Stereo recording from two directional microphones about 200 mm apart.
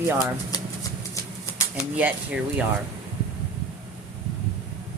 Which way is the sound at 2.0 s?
5° right (ahead or behind).